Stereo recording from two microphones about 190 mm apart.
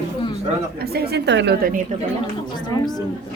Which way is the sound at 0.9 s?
55° right (ahead or behind).